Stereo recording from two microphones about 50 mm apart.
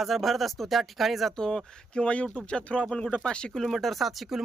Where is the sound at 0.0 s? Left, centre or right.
Centre.